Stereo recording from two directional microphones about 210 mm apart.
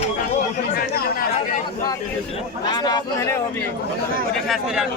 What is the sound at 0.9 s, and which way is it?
Chatter, 45° left (ahead or behind).